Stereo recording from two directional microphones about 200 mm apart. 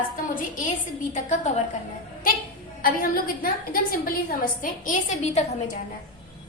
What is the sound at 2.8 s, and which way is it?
A woman's voice, 45° left (ahead or behind).